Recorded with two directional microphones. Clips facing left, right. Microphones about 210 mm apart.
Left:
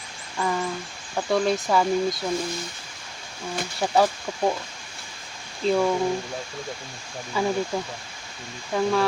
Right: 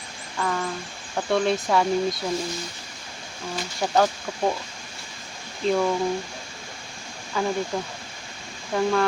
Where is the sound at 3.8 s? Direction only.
5° left (ahead or behind).